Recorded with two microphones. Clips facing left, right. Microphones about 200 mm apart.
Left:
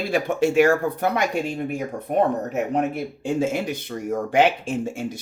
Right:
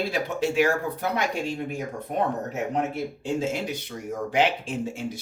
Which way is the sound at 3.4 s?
50° left (ahead or behind).